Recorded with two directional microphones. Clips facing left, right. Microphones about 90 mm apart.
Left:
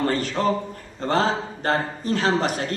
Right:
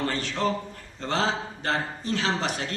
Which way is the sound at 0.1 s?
45° left (ahead or behind).